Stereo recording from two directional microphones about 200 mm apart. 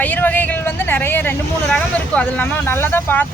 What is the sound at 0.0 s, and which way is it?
Speech, 10° left (ahead or behind).